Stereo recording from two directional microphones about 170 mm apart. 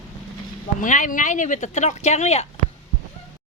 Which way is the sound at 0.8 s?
50° left (ahead or behind).